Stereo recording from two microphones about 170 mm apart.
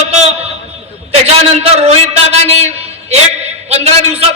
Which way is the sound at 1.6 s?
40° right (ahead or behind).